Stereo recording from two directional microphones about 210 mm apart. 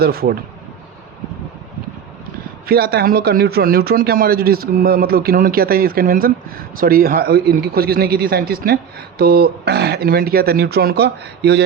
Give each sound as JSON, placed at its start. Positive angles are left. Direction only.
{"t": 0.0, "sound": "speech", "side_deg": -45}
{"t": 2.6, "sound": "speech", "side_deg": -50}